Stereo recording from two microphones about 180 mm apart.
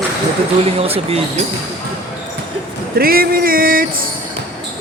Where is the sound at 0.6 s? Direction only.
35° right (ahead or behind).